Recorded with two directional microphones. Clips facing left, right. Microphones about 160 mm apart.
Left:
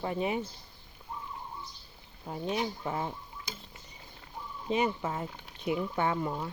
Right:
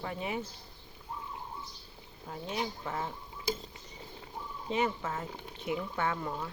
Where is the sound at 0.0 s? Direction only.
20° left (ahead or behind).